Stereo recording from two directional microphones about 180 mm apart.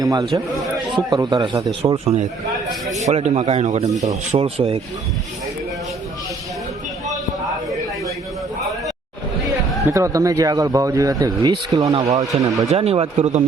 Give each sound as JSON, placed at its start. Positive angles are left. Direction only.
{"t": 0.0, "sound": "a man's voice", "side_deg": -20}
{"t": 2.9, "sound": "speech", "side_deg": -40}
{"t": 9.8, "sound": "speech", "side_deg": -15}
{"t": 11.8, "sound": "speech", "side_deg": -35}